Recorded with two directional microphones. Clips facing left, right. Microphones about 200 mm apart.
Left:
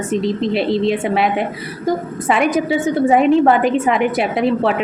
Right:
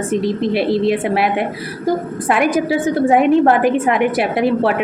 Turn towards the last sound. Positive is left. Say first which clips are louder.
# right 1 dB
turn(degrees=-5)  # may be behind; listen again after turning